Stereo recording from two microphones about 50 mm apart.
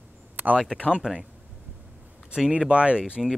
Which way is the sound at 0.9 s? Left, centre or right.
Centre.